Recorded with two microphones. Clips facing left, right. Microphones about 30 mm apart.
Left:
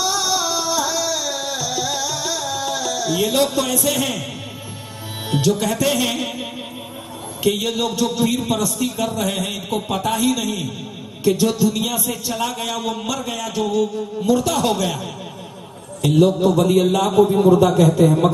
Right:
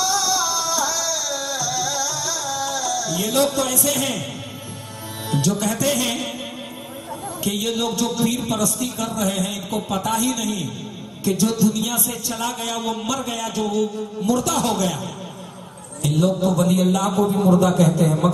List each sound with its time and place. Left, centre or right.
0.0 s music: centre
3.3 s a man's voice: centre
5.3 s a man's voice: centre
7.4 s a man's voice: centre
16.0 s speech: left